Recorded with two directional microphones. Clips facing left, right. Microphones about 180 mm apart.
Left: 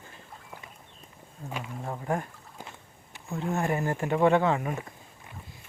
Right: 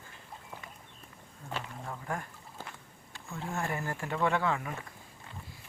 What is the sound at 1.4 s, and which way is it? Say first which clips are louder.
Speech: left 4 dB; 30° left (ahead or behind).